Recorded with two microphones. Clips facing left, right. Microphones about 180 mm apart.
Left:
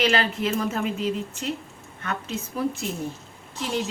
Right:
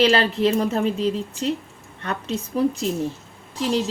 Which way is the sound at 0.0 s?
35° right (ahead or behind).